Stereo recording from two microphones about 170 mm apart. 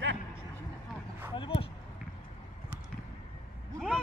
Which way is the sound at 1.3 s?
30° left (ahead or behind).